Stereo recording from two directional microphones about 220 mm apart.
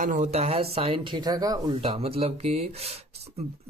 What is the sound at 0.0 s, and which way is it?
Speech, 35° right (ahead or behind).